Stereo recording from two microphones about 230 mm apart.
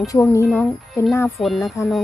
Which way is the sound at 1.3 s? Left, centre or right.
Centre.